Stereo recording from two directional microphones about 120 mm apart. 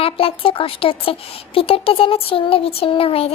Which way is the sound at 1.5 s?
50° left (ahead or behind).